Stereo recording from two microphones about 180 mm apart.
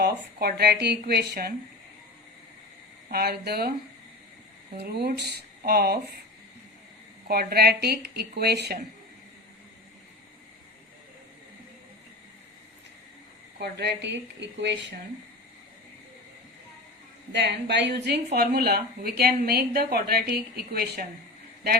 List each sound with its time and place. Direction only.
0.0 s a woman's voice: 60° right (ahead or behind)
3.1 s a woman's voice: 60° right (ahead or behind)
4.8 s a woman's voice: 65° right (ahead or behind)
7.3 s a woman's voice: 60° right (ahead or behind)
13.6 s a woman's voice: 65° right (ahead or behind)
17.3 s a woman's voice: 70° right (ahead or behind)